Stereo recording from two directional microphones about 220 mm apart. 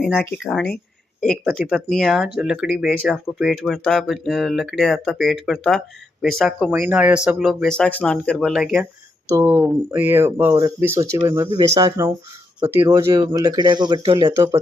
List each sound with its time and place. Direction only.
0.2 s speech: 10° left (ahead or behind)
1.5 s speech: centre (ahead or behind)